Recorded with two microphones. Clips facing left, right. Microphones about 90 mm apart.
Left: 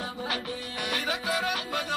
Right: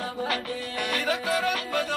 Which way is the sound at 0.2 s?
45° right (ahead or behind).